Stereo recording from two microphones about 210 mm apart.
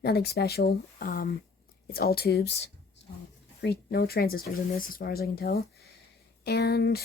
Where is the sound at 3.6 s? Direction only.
50° left (ahead or behind).